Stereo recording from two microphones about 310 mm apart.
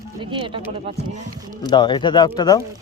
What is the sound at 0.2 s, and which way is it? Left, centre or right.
Speech, centre.